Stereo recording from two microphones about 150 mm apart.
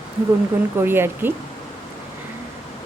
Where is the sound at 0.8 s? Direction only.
15° right (ahead or behind).